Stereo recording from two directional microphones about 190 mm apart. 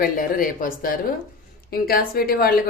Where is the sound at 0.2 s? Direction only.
45° left (ahead or behind).